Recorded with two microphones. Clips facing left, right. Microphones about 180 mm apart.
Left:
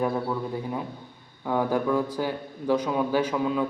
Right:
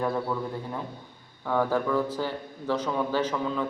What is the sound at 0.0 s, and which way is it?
Speech, 15° left (ahead or behind).